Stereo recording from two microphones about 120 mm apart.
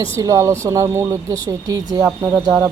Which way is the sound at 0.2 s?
25° right (ahead or behind).